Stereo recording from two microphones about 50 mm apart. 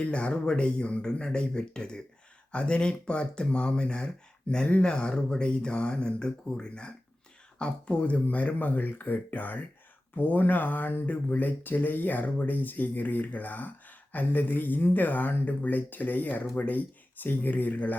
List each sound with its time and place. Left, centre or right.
0.0 s speech: left